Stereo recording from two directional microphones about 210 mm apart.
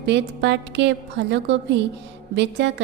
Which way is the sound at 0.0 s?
55° right (ahead or behind).